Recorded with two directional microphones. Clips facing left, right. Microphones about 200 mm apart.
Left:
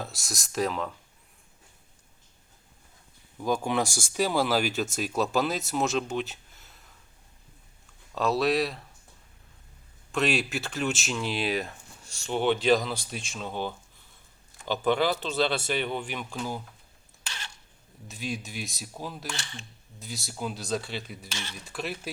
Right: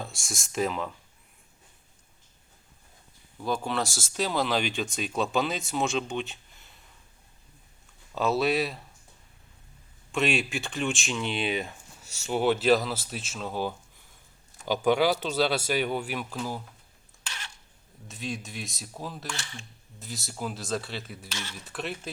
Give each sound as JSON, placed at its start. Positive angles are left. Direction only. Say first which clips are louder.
{"t": 0.0, "sound": "speech", "louder": "left 1 dB", "side_deg": 0}
{"t": 3.4, "sound": "speech", "louder": "left 2 dB", "side_deg": 15}
{"t": 8.1, "sound": "speech", "louder": "even", "side_deg": 0}
{"t": 10.1, "sound": "speech", "louder": "even", "side_deg": 0}
{"t": 18.1, "sound": "speech", "louder": "left 1 dB", "side_deg": 0}